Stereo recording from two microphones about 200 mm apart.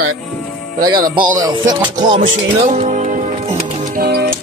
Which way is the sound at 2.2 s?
40° right (ahead or behind).